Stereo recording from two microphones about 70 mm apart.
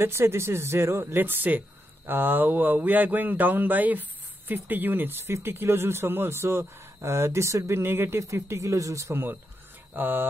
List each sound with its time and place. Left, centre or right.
0.0 s speech: right
9.1 s speech: right